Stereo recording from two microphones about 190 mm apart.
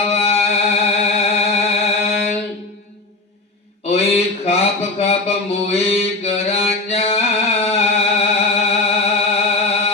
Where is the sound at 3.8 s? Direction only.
35° left (ahead or behind).